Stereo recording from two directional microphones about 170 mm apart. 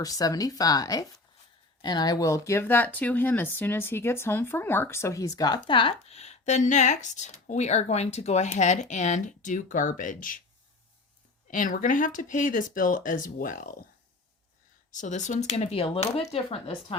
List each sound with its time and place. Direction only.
0.0 s speech: 20° left (ahead or behind); by 10.4 s 50° left (ahead or behind)
11.5 s speech: 50° left (ahead or behind)
14.9 s speech: 45° left (ahead or behind)